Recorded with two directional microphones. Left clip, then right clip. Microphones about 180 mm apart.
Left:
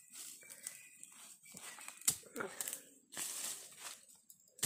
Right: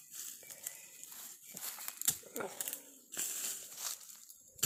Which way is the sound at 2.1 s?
Centre (ahead or behind).